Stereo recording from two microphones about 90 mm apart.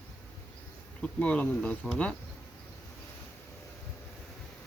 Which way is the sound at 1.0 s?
15° left (ahead or behind).